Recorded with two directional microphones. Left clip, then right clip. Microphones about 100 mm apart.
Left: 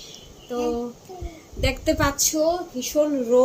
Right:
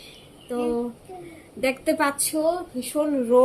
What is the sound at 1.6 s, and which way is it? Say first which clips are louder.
A woman's voice: even; 15° right (ahead or behind).